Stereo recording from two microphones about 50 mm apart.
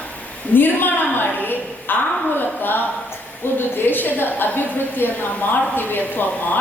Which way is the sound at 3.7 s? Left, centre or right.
Left.